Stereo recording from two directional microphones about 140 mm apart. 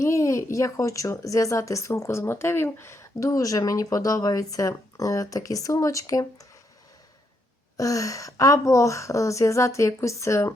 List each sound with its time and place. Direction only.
0.0 s a woman's voice: 20° left (ahead or behind)
7.8 s a woman's voice: 25° left (ahead or behind)